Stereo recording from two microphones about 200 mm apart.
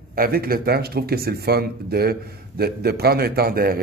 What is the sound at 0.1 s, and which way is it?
Speech, 45° right (ahead or behind).